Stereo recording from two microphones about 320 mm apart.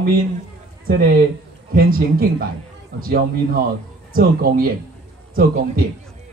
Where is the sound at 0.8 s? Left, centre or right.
Right.